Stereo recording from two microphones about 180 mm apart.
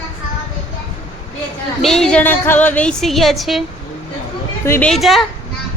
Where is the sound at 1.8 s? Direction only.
Centre (ahead or behind).